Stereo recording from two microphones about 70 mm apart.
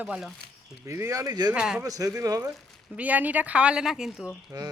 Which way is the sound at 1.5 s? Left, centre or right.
Centre.